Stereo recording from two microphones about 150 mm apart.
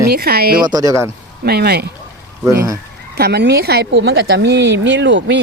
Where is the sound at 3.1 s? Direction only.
90° right.